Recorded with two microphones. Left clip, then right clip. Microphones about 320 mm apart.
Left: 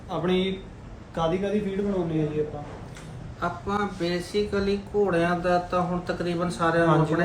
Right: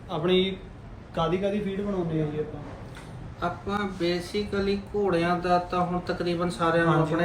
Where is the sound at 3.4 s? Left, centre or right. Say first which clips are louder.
Left 2 dB; centre.